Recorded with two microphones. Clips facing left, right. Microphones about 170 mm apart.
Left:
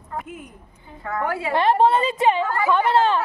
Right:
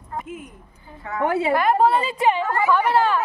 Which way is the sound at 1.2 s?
25° right (ahead or behind).